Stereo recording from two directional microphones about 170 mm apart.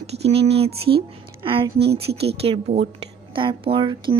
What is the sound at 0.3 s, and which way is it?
A woman's voice, 35° right (ahead or behind).